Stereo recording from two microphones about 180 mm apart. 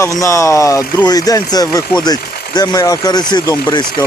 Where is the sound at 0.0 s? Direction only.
15° left (ahead or behind).